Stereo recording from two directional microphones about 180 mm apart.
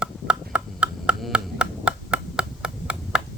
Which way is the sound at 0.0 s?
5° right (ahead or behind).